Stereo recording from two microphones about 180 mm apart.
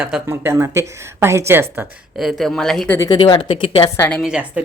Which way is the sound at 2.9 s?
25° left (ahead or behind).